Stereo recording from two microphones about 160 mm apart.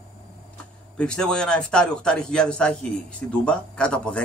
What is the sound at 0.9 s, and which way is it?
A man's voice, 5° left (ahead or behind).